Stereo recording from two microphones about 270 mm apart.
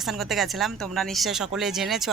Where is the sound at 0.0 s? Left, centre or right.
Centre.